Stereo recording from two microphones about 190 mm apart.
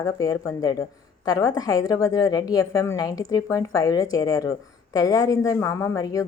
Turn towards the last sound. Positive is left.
turn(degrees=20)  # may be behind; listen again after turning